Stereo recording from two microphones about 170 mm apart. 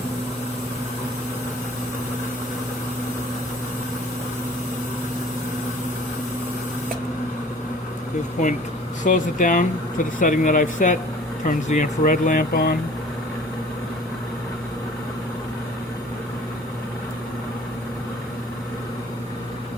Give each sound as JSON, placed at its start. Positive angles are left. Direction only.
{"t": 9.0, "sound": "speech", "side_deg": 50}